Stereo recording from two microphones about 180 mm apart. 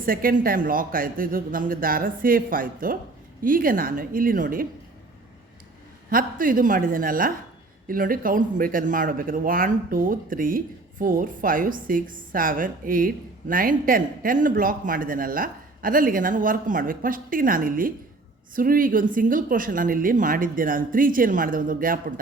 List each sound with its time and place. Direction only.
0.0 s a woman's voice: 50° right (ahead or behind)
6.1 s a woman's voice: 50° right (ahead or behind)